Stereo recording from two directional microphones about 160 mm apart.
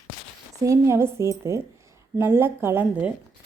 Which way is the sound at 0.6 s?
20° right (ahead or behind).